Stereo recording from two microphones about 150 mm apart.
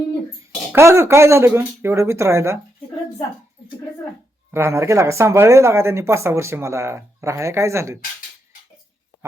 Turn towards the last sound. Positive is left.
turn(degrees=-20)  # may be behind; listen again after turning